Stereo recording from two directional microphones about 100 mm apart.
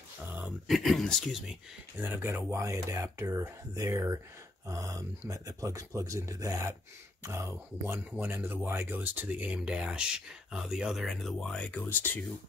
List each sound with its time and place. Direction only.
0.7 s speech: centre (ahead or behind)
2.0 s speech: 25° right (ahead or behind); by 12.2 s 20° left (ahead or behind)